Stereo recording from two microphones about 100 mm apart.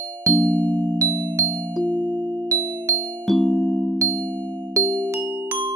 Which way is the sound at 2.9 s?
35° right (ahead or behind).